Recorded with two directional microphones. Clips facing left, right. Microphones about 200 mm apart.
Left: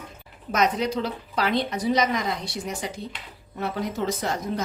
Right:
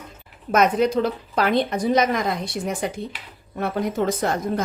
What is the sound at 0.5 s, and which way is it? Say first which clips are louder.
A woman's voice: right 5 dB; 55° right (ahead or behind).